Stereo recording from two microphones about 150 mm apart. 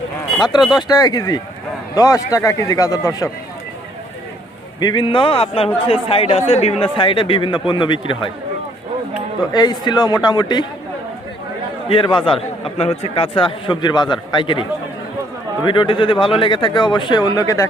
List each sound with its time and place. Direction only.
0.4 s speech: 30° left (ahead or behind)
4.8 s speech: 30° left (ahead or behind)
9.5 s speech: 30° left (ahead or behind)
11.9 s speech: 35° left (ahead or behind)